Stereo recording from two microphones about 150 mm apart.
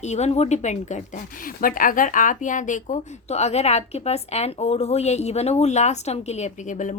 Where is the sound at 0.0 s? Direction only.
50° left (ahead or behind).